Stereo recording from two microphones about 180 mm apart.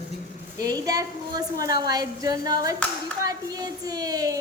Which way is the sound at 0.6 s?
20° right (ahead or behind).